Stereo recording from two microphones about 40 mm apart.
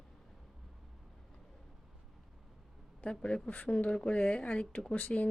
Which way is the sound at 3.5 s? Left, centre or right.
Left.